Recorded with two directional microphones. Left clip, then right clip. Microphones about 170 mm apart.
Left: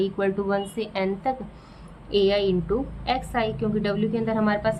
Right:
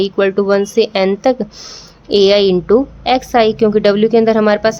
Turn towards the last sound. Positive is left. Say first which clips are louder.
# right 13 dB
turn(degrees=-90)